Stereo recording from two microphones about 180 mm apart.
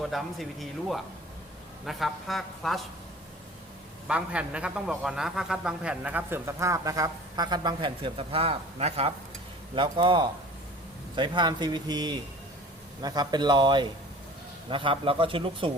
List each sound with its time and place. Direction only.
0.0 s speech: centre (ahead or behind)
4.1 s a man's voice: 5° right (ahead or behind); by 15.7 s 30° right (ahead or behind)